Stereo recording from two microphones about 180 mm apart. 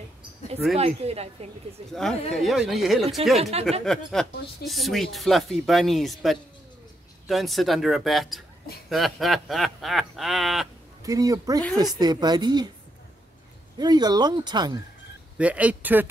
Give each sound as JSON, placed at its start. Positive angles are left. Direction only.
{"t": 0.7, "sound": "a woman's voice", "side_deg": -35}
{"t": 1.9, "sound": "speech", "side_deg": 0}
{"t": 3.3, "sound": "a woman's voice", "side_deg": -35}
{"t": 3.8, "sound": "speech", "side_deg": 5}
{"t": 11.0, "sound": "speech", "side_deg": -20}
{"t": 13.7, "sound": "speech", "side_deg": -20}
{"t": 15.3, "sound": "a man's voice", "side_deg": -5}